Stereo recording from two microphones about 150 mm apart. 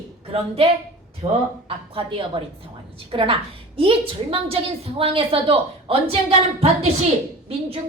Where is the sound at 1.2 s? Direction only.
40° right (ahead or behind).